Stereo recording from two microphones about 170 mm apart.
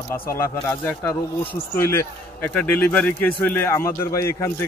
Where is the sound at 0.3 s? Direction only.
10° left (ahead or behind).